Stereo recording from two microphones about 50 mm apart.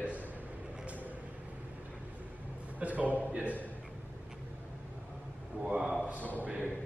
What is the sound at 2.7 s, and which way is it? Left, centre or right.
Speech, right.